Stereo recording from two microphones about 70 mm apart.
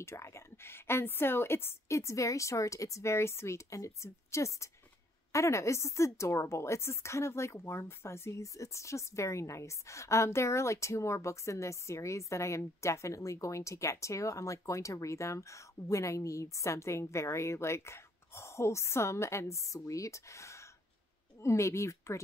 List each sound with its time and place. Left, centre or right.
0.0 s a woman's voice: left